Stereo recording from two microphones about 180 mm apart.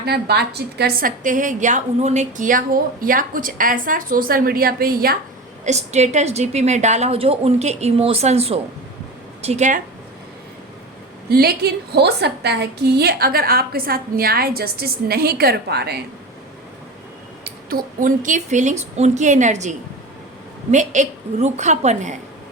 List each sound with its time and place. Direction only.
0.0 s a woman's voice: 60° right (ahead or behind)
5.6 s a woman's voice: 40° right (ahead or behind)
11.3 s a woman's voice: 60° right (ahead or behind)
17.4 s a woman's voice: 55° right (ahead or behind)